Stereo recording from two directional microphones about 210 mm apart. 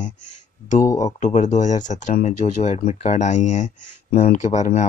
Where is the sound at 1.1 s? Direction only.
35° left (ahead or behind).